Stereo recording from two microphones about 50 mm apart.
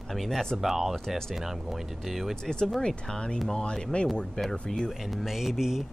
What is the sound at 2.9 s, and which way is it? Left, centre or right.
Speech, centre.